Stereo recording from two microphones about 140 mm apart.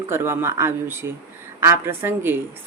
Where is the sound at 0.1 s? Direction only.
15° right (ahead or behind).